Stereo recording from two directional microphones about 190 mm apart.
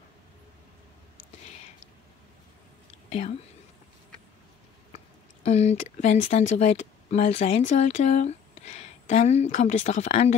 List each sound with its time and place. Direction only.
2.9 s whispering: 35° left (ahead or behind)
5.4 s speech: 35° left (ahead or behind)